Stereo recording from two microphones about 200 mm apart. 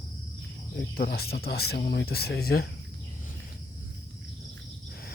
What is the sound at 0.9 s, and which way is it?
Speech, 50° left (ahead or behind).